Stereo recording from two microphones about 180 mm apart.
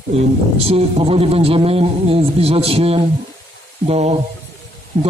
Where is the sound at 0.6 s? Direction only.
35° right (ahead or behind).